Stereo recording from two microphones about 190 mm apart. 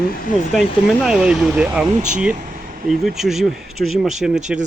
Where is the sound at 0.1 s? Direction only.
50° left (ahead or behind).